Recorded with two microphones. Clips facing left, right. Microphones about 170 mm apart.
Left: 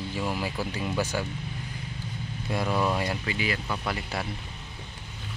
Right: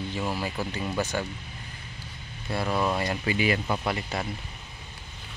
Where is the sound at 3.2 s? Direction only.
20° right (ahead or behind).